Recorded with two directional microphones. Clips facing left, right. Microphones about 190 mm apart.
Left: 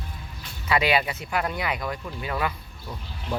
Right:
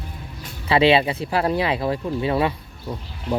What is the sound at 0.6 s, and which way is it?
Speech, 30° right (ahead or behind).